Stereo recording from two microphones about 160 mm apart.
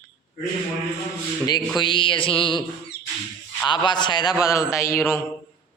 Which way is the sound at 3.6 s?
30° left (ahead or behind).